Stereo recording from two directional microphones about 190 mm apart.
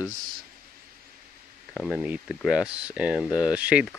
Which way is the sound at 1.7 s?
Centre (ahead or behind).